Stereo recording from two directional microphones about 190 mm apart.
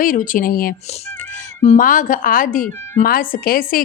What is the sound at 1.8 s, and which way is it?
Speech, 45° left (ahead or behind).